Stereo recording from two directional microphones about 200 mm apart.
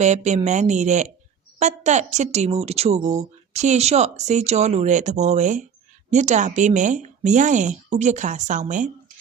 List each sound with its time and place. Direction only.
0.0 s speech: 35° right (ahead or behind)